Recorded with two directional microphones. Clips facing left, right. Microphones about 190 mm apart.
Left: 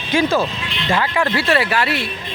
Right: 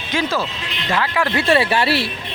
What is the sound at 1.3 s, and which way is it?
Speech, 25° right (ahead or behind).